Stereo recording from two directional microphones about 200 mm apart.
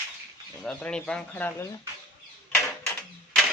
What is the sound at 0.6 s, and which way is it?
A man's voice, 5° left (ahead or behind).